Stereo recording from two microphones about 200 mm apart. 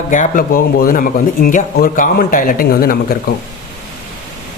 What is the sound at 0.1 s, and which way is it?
Speech, 40° left (ahead or behind).